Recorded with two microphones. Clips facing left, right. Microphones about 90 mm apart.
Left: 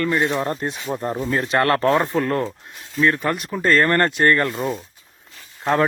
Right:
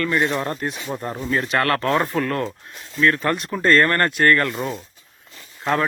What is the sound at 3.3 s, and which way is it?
Speech, 5° left (ahead or behind).